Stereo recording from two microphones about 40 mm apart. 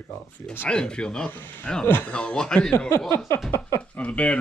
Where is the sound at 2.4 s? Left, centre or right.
Centre.